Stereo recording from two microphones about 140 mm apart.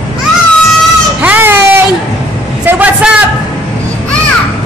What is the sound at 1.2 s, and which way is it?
Baby cry, 15° right (ahead or behind).